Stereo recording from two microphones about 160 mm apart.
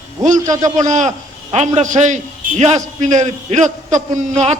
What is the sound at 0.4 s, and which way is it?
Speech, 20° right (ahead or behind).